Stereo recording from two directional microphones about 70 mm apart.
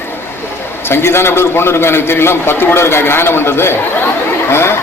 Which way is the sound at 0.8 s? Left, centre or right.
Left.